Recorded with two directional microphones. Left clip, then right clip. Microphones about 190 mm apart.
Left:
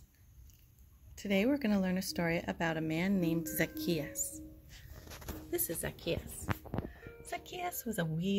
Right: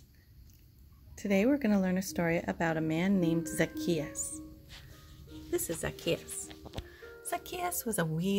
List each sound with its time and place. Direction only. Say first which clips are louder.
1.1 s speech: right 3 dB; 5° right (ahead or behind)
4.7 s music: right 5 dB; 20° left (ahead or behind)
5.8 s speech: right 4 dB; 5° right (ahead or behind)
7.2 s a woman's voice: right 4 dB; 5° right (ahead or behind)